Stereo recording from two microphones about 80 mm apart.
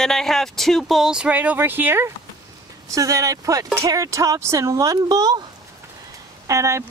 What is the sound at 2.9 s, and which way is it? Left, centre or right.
Speech, right.